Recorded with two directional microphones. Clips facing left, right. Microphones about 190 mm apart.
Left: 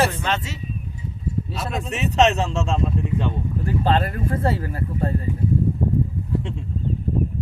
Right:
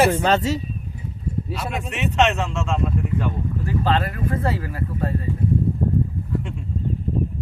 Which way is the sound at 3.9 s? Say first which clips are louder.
Left 1 dB; 30° left (ahead or behind).